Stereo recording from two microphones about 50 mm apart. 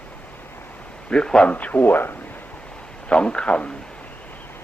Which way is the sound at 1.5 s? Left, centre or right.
Left.